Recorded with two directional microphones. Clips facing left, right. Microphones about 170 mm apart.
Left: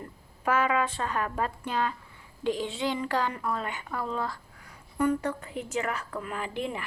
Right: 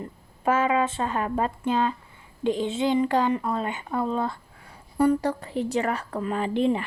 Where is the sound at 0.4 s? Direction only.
25° right (ahead or behind).